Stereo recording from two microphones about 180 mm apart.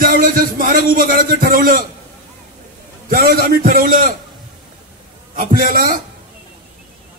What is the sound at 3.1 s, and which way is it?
Speech, 55° right (ahead or behind).